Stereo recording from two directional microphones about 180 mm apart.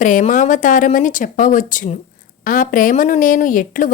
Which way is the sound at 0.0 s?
45° left (ahead or behind).